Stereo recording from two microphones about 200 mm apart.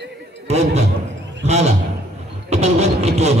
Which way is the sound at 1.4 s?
35° right (ahead or behind).